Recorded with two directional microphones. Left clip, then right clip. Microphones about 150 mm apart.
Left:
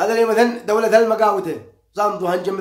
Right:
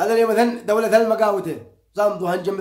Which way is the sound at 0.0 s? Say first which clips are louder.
Left 1 dB; 15° right (ahead or behind).